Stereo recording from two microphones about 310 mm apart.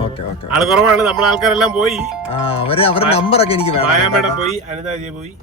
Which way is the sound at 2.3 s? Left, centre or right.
Centre.